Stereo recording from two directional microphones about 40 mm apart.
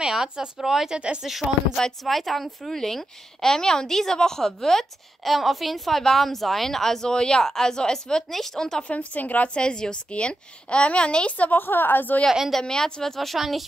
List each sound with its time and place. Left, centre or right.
0.1 s speech: centre
0.9 s speech: right
2.0 s a woman's voice: centre
8.3 s a woman's voice: centre
8.8 s a woman's voice: left
9.5 s a woman's voice: left
11.5 s a woman's voice: left
12.3 s a woman's voice: centre
12.5 s a woman's voice: centre